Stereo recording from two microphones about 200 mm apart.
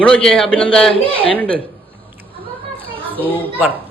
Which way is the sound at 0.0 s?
5° left (ahead or behind).